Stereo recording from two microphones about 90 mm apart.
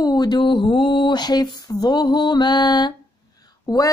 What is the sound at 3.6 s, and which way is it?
Speech, 40° left (ahead or behind).